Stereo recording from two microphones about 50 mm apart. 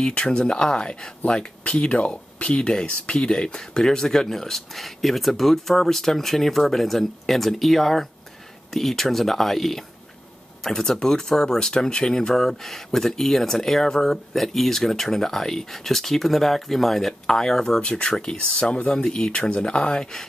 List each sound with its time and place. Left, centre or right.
0.0 s speech: centre
17.8 s speech: left